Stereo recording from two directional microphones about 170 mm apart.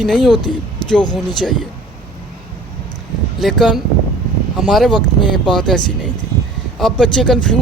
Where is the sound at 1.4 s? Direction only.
Centre (ahead or behind).